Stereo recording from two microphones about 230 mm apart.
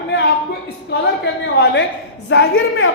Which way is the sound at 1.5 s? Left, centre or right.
Left.